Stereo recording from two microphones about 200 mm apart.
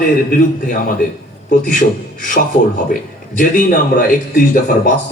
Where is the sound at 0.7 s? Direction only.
45° left (ahead or behind).